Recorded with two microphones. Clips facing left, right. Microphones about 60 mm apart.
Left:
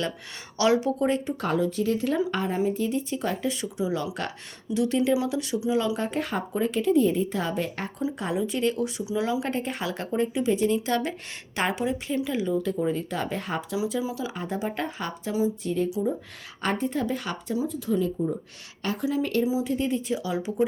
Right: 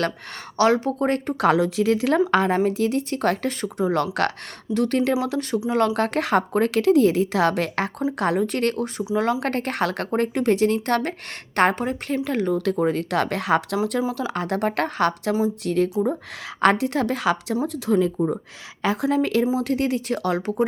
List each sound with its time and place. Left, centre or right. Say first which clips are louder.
0.5 s a woman's voice: right 3 dB; right
1.4 s a woman's voice: right 6 dB; right
4.7 s speech: right 3 dB; right
5.2 s a woman's voice: right 3 dB; right
5.6 s speech: right 5 dB; right
8.2 s a woman's voice: right 5 dB; right
12.9 s speech: right 6 dB; right
14.2 s speech: right 6 dB; right
15.6 s a woman's voice: right 5 dB; right
19.0 s a woman's voice: right 4 dB; right
19.5 s speech: right 4 dB; right